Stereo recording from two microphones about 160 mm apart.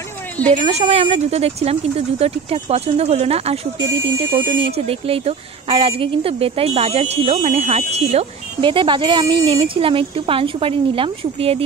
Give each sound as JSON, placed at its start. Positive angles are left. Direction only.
{"t": 0.6, "sound": "a woman's voice", "side_deg": -40}